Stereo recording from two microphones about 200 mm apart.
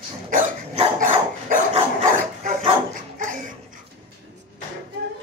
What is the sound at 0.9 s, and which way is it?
Dog, 40° right (ahead or behind).